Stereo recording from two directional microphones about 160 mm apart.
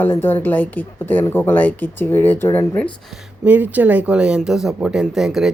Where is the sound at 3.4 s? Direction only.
10° right (ahead or behind).